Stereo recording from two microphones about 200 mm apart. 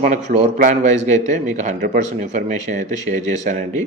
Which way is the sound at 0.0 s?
35° right (ahead or behind).